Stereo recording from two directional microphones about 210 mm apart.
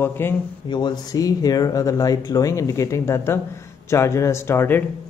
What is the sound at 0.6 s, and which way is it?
Speech, 20° left (ahead or behind).